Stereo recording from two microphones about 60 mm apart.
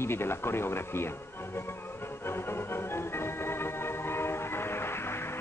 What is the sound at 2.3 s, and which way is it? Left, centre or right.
Music, left.